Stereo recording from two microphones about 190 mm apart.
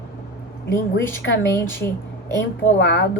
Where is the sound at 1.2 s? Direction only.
75° left (ahead or behind).